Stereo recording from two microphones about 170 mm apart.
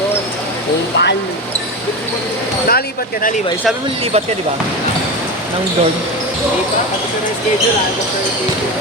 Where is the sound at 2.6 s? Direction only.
60° left (ahead or behind).